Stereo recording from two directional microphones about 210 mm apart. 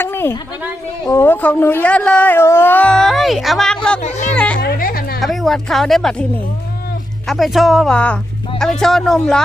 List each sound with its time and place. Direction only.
0.0 s a sound: 10° left (ahead or behind)
1.0 s speech: 10° left (ahead or behind)
4.0 s speech: 35° left (ahead or behind)
4.4 s speech: 5° left (ahead or behind)
4.6 s speech: 45° left (ahead or behind)
5.2 s speech: centre (ahead or behind)
7.3 s speech: centre (ahead or behind)